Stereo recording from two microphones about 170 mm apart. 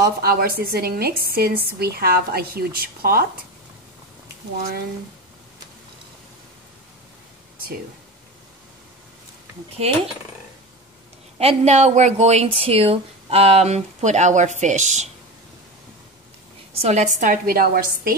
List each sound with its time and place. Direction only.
0.0 s a woman's voice: 65° right (ahead or behind)
9.8 s a woman's voice: 40° right (ahead or behind)
11.3 s a woman's voice: 40° right (ahead or behind)
16.8 s a woman's voice: 45° right (ahead or behind)